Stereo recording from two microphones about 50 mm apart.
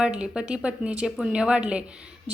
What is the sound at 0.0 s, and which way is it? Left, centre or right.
A woman's voice, centre.